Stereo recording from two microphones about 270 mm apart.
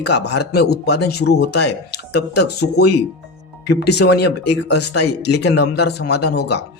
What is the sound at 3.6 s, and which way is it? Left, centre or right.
Speech, left.